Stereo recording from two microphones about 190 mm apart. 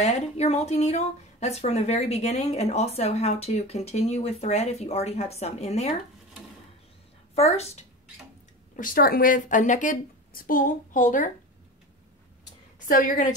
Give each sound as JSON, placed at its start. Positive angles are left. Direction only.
{"t": 0.0, "sound": "speech", "side_deg": 35}
{"t": 7.3, "sound": "speech", "side_deg": 35}
{"t": 8.7, "sound": "a woman's voice", "side_deg": 50}
{"t": 12.7, "sound": "a woman's voice", "side_deg": 45}